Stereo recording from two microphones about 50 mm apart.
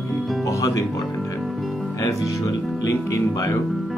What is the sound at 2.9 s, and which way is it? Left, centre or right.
Speech, left.